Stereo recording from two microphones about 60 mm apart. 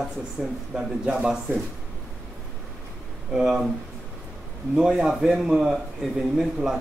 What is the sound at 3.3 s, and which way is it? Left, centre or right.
Speech, centre.